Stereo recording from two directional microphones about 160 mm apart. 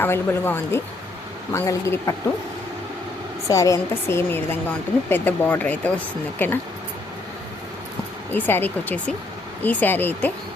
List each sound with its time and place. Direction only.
0.0 s a woman's voice: 15° left (ahead or behind)
3.4 s a woman's voice: 20° left (ahead or behind)
8.3 s speech: 10° left (ahead or behind)